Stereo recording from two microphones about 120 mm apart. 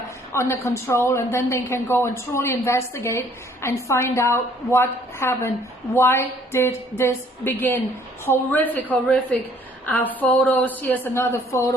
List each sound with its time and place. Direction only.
0.3 s a woman's voice: 20° left (ahead or behind)